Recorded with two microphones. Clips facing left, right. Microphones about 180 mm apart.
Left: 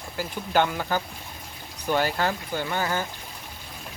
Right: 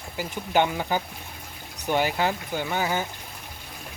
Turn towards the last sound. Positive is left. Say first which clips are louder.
# right 1 dB
turn(degrees=-15)  # may be behind; listen again after turning